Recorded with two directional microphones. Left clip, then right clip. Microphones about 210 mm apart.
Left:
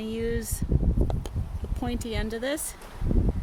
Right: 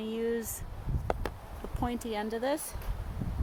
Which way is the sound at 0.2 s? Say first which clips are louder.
Left 2 dB; 30° left (ahead or behind).